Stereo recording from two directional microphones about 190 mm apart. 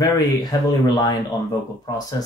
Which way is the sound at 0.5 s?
20° left (ahead or behind).